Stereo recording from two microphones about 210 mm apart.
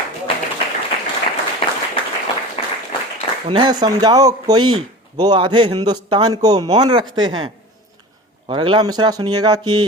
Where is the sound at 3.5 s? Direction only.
20° right (ahead or behind).